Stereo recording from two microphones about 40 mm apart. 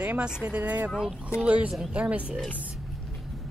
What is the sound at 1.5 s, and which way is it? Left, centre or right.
Speech, right.